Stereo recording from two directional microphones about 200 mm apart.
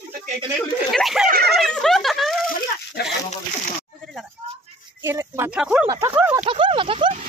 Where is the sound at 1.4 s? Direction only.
Centre (ahead or behind).